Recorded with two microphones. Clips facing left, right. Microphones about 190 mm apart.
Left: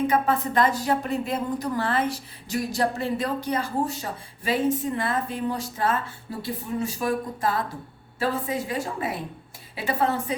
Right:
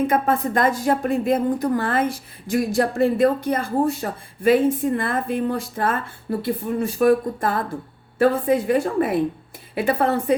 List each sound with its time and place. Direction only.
0.1 s a woman's voice: 50° right (ahead or behind)